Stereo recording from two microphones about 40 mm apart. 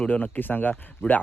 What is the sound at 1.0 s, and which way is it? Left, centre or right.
Speech, left.